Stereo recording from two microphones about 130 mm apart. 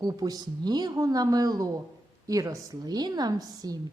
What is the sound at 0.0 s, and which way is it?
A woman's voice, 30° right (ahead or behind).